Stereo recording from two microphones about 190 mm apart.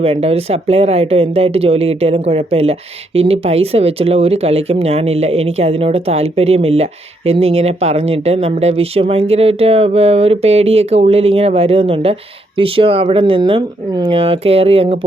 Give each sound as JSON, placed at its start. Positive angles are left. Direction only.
{"t": 0.0, "sound": "speech", "side_deg": -30}